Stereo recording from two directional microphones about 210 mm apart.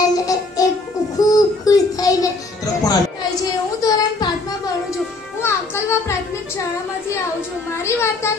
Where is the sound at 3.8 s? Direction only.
15° left (ahead or behind).